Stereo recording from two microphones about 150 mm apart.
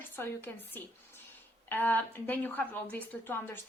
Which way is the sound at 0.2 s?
15° left (ahead or behind).